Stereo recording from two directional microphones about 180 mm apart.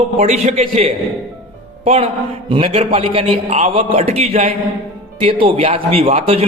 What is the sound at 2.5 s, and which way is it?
A man's voice, 30° right (ahead or behind).